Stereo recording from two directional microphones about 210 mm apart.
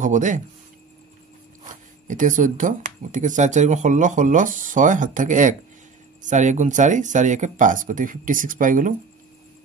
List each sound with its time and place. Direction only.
0.0 s speech: 35° right (ahead or behind)
1.6 s speech: 35° right (ahead or behind)